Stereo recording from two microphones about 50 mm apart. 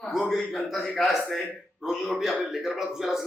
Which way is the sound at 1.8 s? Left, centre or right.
Centre.